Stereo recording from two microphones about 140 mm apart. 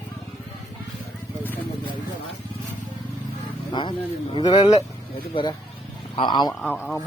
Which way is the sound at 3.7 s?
35° left (ahead or behind).